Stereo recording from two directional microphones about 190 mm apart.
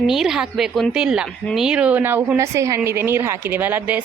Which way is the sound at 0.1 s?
Centre (ahead or behind).